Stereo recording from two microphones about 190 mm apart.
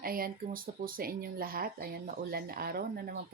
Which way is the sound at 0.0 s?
50° right (ahead or behind).